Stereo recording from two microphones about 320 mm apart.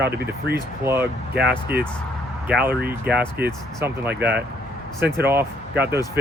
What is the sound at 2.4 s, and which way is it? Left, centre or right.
Speech, centre.